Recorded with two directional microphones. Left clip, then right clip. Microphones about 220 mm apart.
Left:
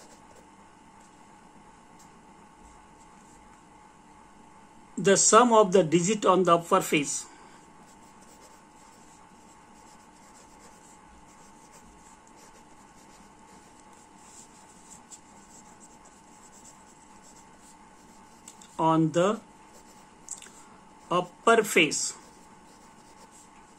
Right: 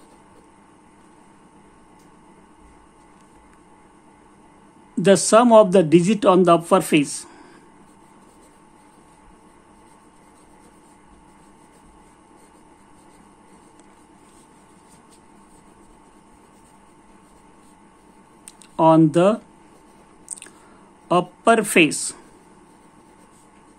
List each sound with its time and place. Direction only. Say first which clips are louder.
5.0 s speech: right 5 dB; 35° right (ahead or behind)
18.8 s speech: right 9 dB; 40° right (ahead or behind)
21.1 s speech: right 6 dB; 40° right (ahead or behind)